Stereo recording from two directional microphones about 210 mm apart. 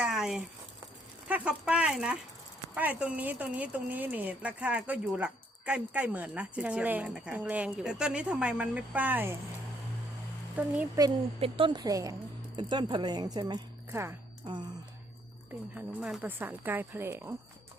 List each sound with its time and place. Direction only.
0.0 s a sound: centre (ahead or behind)
1.3 s speech: 5° right (ahead or behind)
10.6 s speech: 10° right (ahead or behind)
11.3 s a woman's voice: 25° right (ahead or behind)
15.7 s speech: 5° right (ahead or behind)